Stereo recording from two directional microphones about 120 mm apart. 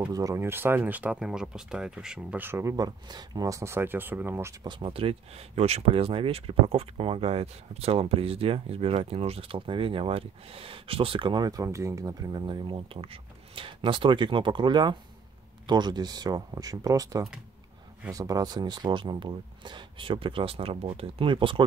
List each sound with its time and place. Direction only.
0.0 s speech: 30° right (ahead or behind)
4.6 s speech: 40° right (ahead or behind)
5.6 s speech: 60° right (ahead or behind); by 21.6 s 45° right (ahead or behind)